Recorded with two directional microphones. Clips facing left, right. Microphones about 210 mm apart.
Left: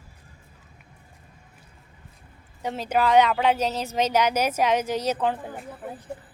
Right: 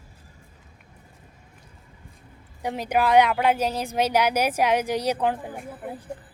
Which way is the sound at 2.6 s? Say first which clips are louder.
Even; 15° right (ahead or behind).